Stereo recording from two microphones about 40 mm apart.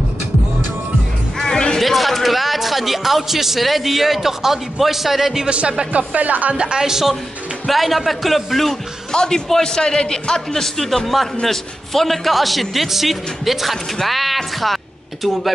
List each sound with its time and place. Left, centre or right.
1.4 s music: centre
1.8 s a man's voice: centre
5.5 s speech: right
6.5 s a woman's voice: right
6.8 s a man's voice: centre
9.1 s a man's voice: centre